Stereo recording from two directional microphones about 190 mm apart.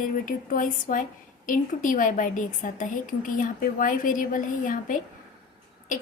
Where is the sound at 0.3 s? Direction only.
45° left (ahead or behind).